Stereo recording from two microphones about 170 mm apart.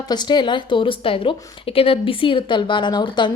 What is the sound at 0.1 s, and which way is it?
A woman's voice, 25° left (ahead or behind).